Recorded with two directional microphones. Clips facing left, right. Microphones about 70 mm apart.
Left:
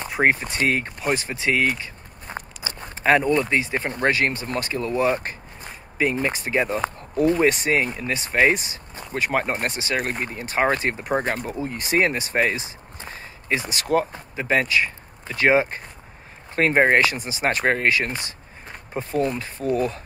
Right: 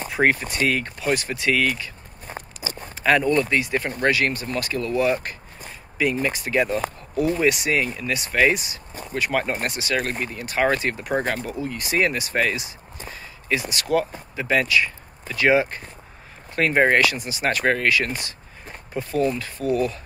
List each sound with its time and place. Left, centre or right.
0.1 s speech: left
3.0 s speech: left
7.2 s speech: left